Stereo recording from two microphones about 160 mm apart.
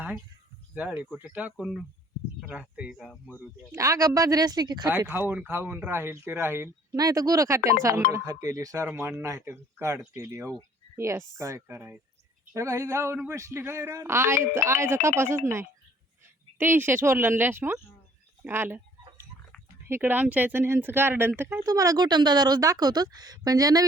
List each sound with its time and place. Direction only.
0.7 s speech: 5° right (ahead or behind)
3.1 s speech: 10° left (ahead or behind)
3.6 s speech: 20° right (ahead or behind)
4.9 s speech: 15° right (ahead or behind)
16.6 s speech: 15° right (ahead or behind)
19.9 s speech: 10° right (ahead or behind)